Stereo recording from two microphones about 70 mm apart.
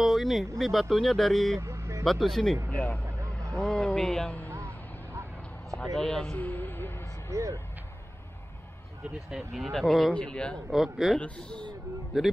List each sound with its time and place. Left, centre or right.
0.0 s speech: centre
1.6 s vehicle: right
2.0 s speech: centre
2.7 s speech: centre
5.9 s speech: centre
6.3 s a sound: left
7.3 s speech: right
9.3 s speech: centre
10.1 s speech: centre
10.7 s speech: centre
11.1 s speech: centre
12.1 s speech: centre